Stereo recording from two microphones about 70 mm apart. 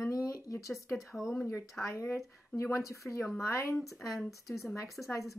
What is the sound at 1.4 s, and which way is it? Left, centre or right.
Speech, left.